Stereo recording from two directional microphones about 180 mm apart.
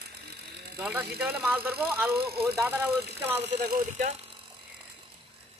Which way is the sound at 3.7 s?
45° right (ahead or behind).